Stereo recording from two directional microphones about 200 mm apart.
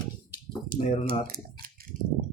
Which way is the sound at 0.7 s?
45° right (ahead or behind).